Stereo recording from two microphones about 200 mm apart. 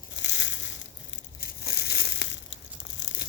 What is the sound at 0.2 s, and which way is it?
Crushing, 65° left (ahead or behind).